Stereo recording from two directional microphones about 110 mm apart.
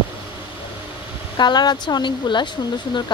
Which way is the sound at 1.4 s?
40° left (ahead or behind).